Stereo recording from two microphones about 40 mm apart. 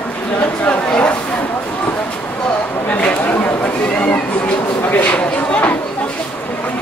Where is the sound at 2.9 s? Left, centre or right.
Left.